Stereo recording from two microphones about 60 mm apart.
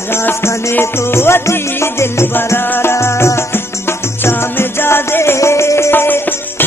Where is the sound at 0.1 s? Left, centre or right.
Left.